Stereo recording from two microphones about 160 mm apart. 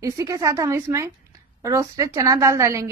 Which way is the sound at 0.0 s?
20° right (ahead or behind).